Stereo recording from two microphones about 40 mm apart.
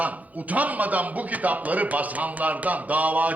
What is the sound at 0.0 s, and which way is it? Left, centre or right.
A man's voice, right.